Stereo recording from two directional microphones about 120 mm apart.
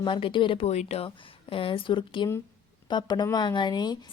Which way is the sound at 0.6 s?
65° left (ahead or behind).